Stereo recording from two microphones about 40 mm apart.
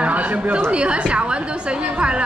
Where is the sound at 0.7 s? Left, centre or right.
Right.